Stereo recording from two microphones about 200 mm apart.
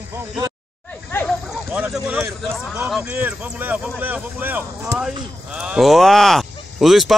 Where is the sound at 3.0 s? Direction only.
10° right (ahead or behind).